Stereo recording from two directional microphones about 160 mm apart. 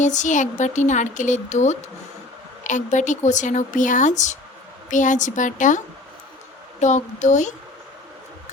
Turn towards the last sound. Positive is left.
turn(degrees=50)  # may be behind; listen again after turning